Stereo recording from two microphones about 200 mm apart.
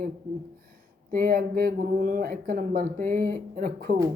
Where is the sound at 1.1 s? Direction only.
45° right (ahead or behind).